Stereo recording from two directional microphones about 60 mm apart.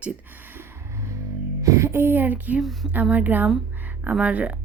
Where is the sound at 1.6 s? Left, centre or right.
Right.